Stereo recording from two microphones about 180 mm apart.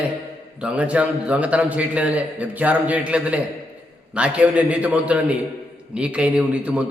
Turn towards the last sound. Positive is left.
turn(degrees=-5)  # may be behind; listen again after turning